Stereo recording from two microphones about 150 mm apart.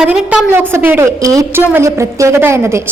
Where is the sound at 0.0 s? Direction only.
5° right (ahead or behind).